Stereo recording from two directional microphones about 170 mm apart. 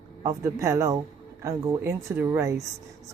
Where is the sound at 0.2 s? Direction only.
20° right (ahead or behind).